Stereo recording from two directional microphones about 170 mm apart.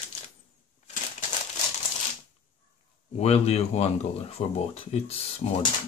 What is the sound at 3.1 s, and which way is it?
Speech, 35° left (ahead or behind).